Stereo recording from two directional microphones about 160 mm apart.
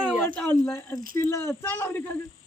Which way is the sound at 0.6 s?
15° left (ahead or behind).